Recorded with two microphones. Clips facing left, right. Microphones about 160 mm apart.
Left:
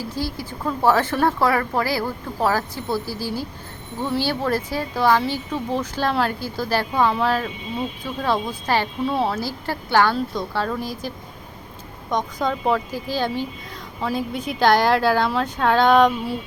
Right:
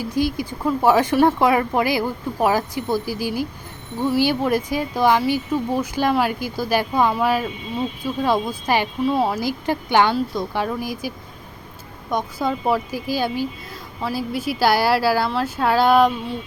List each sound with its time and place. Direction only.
0.0 s speech: 15° right (ahead or behind)
12.1 s speech: 10° right (ahead or behind)